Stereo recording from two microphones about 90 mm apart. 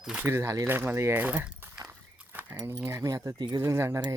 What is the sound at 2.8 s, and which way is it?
Speech, 35° right (ahead or behind).